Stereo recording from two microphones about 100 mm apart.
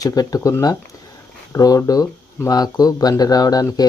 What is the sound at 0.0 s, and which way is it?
Speech, 35° left (ahead or behind).